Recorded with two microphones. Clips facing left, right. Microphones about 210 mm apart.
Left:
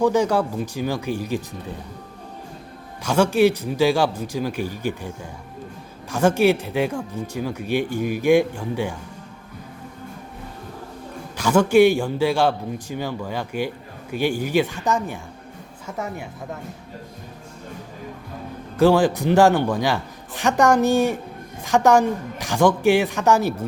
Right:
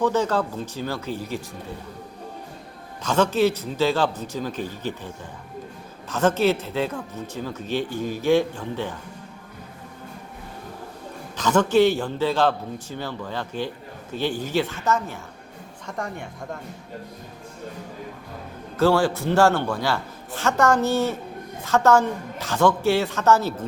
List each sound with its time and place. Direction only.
0.0 s speech: 15° left (ahead or behind)
3.0 s speech: 10° left (ahead or behind)
11.3 s speech: 10° left (ahead or behind)
18.8 s speech: 15° left (ahead or behind)